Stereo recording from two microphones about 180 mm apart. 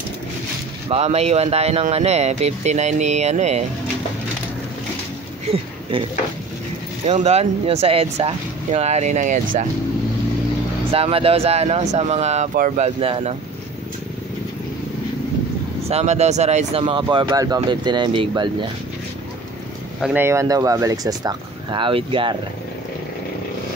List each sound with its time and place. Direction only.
0.8 s speech: 35° right (ahead or behind)
5.5 s speech: 30° right (ahead or behind)
7.1 s speech: 35° right (ahead or behind)
10.9 s speech: 30° right (ahead or behind)
15.9 s speech: 35° right (ahead or behind)
20.0 s speech: 10° right (ahead or behind); by 22.4 s 30° right (ahead or behind)